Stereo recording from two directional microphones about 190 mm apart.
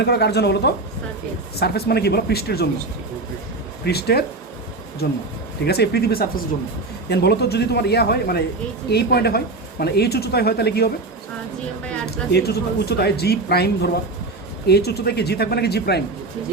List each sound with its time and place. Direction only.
0.0 s speech: 60° left (ahead or behind)
3.8 s speech: 60° left (ahead or behind)
5.6 s speech: 60° left (ahead or behind)
12.3 s speech: 55° left (ahead or behind)